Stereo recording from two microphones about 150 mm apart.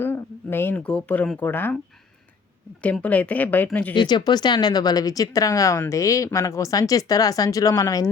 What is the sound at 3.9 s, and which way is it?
Speech, 30° left (ahead or behind).